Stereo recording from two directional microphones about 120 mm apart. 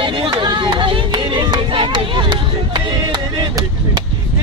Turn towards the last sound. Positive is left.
turn(degrees=-35)  # may be behind; listen again after turning